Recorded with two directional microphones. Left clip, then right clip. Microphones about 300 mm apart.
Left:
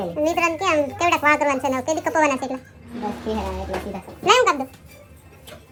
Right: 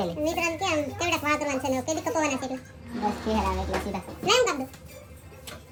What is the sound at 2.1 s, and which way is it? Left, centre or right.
Speech, left.